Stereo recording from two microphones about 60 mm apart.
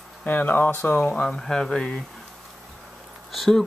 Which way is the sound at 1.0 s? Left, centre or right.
Centre.